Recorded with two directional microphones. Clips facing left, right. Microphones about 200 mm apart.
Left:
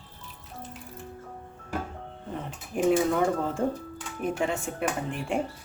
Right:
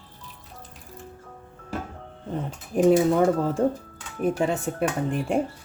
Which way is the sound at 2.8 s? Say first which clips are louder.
Right 5 dB; 35° right (ahead or behind).